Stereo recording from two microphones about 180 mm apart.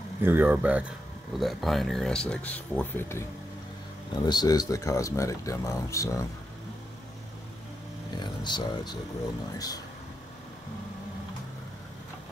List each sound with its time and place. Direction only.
0.2 s speech: 10° right (ahead or behind); by 6.2 s 20° left (ahead or behind)
8.2 s speech: 25° left (ahead or behind)